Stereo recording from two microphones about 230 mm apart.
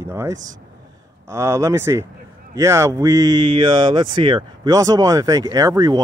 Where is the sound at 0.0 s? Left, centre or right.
Centre.